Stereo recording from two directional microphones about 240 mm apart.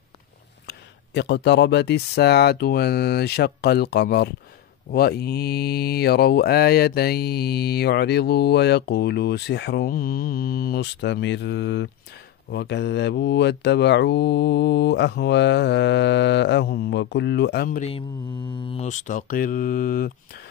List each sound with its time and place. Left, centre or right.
0.7 s mantra: left